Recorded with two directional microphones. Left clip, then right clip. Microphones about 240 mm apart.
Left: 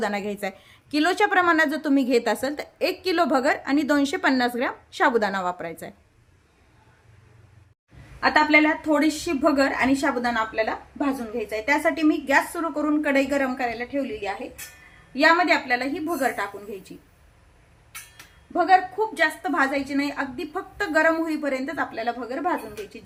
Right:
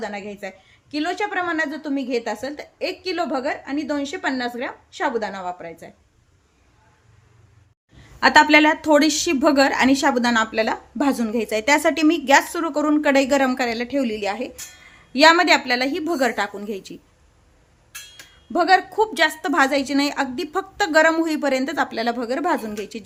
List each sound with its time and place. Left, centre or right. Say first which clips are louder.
0.0 s a woman's voice: left 3 dB; centre
8.2 s a woman's voice: right 5 dB; right
18.5 s a woman's voice: right 2 dB; right